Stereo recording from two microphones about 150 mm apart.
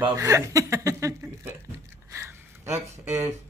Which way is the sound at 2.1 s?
15° right (ahead or behind).